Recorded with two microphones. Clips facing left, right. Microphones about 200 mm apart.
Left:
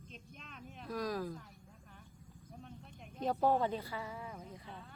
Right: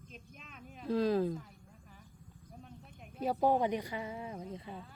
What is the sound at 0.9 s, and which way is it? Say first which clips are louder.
Speech: right 8 dB; 25° right (ahead or behind).